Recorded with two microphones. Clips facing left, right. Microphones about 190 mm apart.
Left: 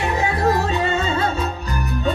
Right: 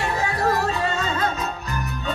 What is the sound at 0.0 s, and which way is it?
Music, 20° left (ahead or behind).